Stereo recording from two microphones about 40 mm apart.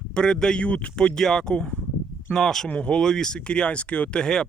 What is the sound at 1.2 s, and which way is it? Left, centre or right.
Speech, centre.